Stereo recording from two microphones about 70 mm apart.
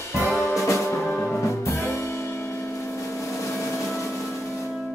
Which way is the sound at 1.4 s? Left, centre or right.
Left.